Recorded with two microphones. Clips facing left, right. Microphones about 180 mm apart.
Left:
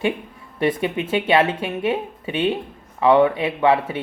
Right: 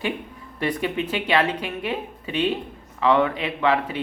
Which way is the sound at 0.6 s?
25° left (ahead or behind).